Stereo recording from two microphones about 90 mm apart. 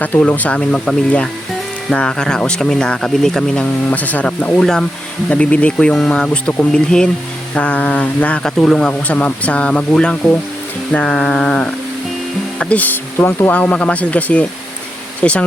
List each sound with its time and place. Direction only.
0.2 s speech: 15° left (ahead or behind)
5.7 s speech: 5° left (ahead or behind)
8.4 s speech: 5° left (ahead or behind)